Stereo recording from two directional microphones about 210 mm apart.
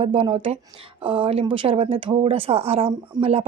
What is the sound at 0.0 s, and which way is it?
Speech, 25° right (ahead or behind).